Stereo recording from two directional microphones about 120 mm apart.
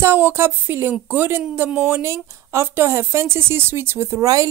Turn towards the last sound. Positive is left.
turn(degrees=-30)  # may be behind; listen again after turning